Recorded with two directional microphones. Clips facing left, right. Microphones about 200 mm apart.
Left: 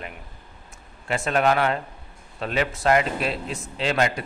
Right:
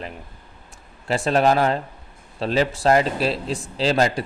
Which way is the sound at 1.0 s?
35° right (ahead or behind).